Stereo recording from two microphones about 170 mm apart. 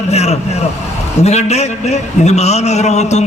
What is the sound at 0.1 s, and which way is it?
Vehicle, 40° left (ahead or behind).